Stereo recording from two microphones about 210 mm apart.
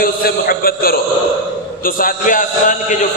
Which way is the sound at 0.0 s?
45° left (ahead or behind).